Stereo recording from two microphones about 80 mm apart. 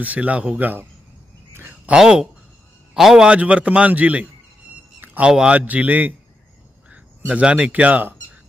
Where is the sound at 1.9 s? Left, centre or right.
Centre.